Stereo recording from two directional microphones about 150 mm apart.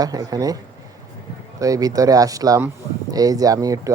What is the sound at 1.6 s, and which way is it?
Speech, 25° right (ahead or behind).